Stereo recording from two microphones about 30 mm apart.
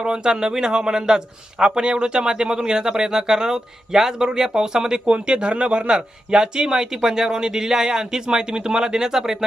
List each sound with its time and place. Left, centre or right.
0.0 s speech: right